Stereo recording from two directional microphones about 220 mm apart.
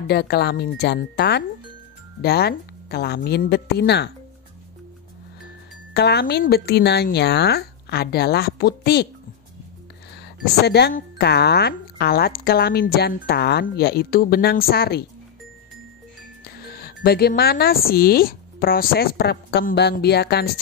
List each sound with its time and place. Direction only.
0.0 s speech: 45° left (ahead or behind)
5.9 s speech: 50° left (ahead or behind)
10.1 s speech: 50° left (ahead or behind)
16.7 s speech: 45° left (ahead or behind)